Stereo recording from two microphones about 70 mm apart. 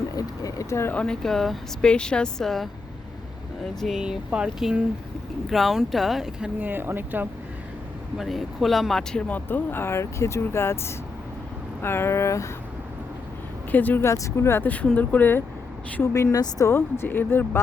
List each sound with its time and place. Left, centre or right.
0.1 s a sound: left
0.9 s a woman's voice: centre
3.8 s speech: centre
4.0 s speech: centre
5.5 s speech: centre
6.6 s speech: right
8.2 s speech: centre
9.3 s speech: left
13.7 s speech: left
14.0 s speech: left
14.9 s speech: left
16.1 s speech: left
16.6 s speech: left